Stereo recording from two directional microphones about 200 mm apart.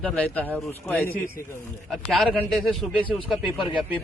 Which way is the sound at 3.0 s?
25° left (ahead or behind).